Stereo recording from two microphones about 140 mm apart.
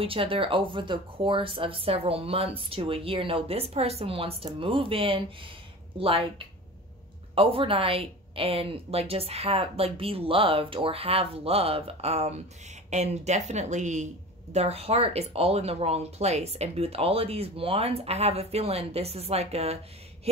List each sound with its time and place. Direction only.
0.0 s speech: 40° right (ahead or behind)